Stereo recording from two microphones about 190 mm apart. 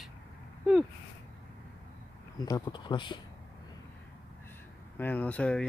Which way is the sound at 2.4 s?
20° left (ahead or behind).